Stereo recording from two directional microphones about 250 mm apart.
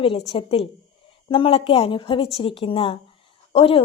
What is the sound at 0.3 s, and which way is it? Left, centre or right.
A woman's voice, left.